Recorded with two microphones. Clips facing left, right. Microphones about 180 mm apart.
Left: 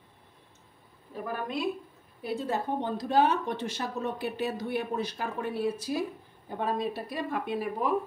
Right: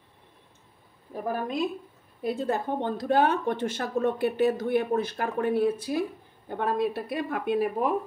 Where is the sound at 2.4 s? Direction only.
55° right (ahead or behind).